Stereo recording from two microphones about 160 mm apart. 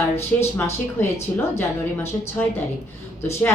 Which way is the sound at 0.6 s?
15° left (ahead or behind).